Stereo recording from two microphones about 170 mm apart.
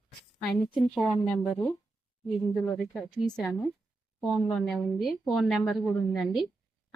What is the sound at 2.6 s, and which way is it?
Speech, 15° left (ahead or behind).